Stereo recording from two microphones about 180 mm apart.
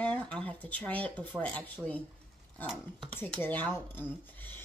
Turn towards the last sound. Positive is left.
turn(degrees=10)  # may be behind; listen again after turning